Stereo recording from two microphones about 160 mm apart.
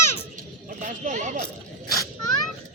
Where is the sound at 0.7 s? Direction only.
50° right (ahead or behind).